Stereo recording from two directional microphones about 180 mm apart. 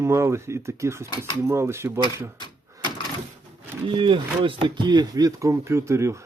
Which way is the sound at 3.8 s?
30° right (ahead or behind).